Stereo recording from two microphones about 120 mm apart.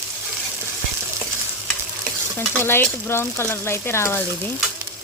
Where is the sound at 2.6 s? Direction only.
15° left (ahead or behind).